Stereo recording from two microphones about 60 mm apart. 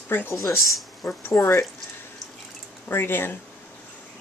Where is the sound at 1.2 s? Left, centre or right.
Left.